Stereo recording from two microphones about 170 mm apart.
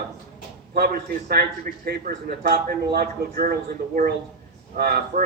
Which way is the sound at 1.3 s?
65° right (ahead or behind).